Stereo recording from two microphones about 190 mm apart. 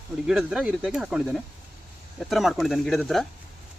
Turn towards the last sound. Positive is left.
turn(degrees=0)  # may be behind; listen again after turning